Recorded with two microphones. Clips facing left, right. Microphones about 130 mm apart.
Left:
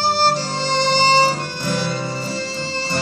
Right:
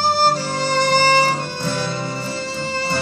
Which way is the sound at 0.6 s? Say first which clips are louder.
Right 2 dB; 50° right (ahead or behind).